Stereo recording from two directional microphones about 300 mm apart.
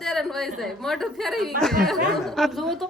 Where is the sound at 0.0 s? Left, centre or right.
Centre.